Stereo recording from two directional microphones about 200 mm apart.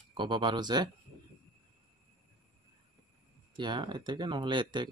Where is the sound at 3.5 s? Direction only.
20° right (ahead or behind).